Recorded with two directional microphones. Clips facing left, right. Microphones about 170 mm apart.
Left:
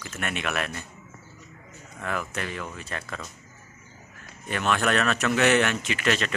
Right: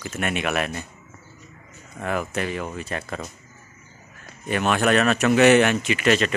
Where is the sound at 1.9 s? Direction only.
20° right (ahead or behind).